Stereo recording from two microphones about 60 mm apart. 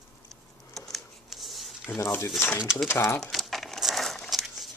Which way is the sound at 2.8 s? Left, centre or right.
Left.